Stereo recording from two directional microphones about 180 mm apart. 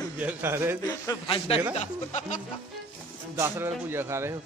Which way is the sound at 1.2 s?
30° left (ahead or behind).